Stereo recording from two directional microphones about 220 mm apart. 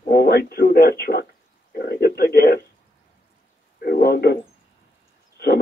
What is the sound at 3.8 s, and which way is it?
Speech, 45° left (ahead or behind).